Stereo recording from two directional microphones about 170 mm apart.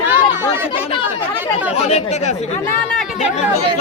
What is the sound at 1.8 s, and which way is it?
Speech, 40° left (ahead or behind).